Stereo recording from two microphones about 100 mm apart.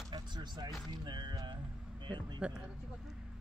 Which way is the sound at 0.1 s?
45° right (ahead or behind).